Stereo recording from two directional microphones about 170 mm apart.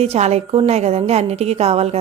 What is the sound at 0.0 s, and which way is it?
A woman's voice, 40° right (ahead or behind).